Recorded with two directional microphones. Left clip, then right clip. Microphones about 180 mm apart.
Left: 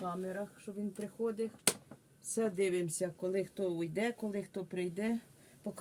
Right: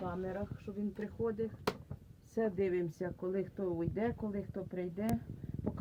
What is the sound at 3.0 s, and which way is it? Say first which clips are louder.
Speech: left 2 dB; 15° left (ahead or behind).